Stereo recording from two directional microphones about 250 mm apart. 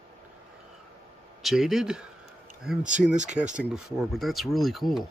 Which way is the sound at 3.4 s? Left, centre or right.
Centre.